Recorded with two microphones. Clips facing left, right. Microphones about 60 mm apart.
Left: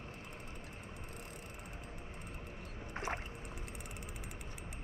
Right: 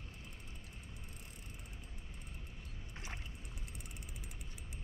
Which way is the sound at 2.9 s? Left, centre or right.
Left.